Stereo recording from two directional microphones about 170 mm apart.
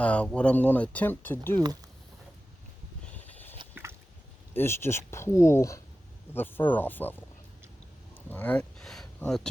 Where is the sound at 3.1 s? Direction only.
10° left (ahead or behind).